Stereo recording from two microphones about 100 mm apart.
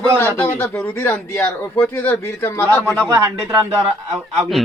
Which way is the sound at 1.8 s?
15° left (ahead or behind).